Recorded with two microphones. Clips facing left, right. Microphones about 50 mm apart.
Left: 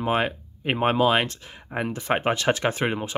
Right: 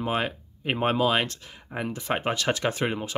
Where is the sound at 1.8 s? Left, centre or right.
Left.